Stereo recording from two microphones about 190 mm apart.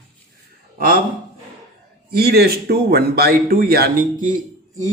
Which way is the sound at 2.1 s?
55° right (ahead or behind).